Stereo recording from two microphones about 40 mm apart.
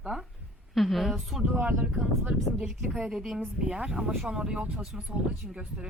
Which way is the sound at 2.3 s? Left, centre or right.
Right.